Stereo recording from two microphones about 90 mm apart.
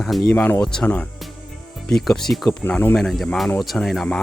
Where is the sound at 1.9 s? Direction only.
5° left (ahead or behind).